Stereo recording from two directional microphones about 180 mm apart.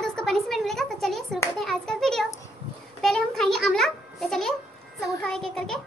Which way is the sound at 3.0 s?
Centre (ahead or behind).